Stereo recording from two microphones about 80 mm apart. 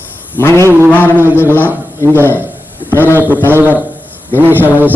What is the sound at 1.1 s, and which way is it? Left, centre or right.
A man's voice, right.